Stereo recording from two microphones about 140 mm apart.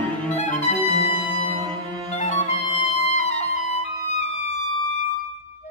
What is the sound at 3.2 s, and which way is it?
Music, 55° left (ahead or behind).